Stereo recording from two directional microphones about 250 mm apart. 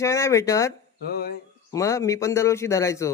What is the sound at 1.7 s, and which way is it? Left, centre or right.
A man's voice, centre.